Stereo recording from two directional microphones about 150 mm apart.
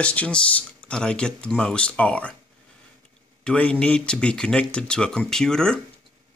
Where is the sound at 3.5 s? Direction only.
5° left (ahead or behind).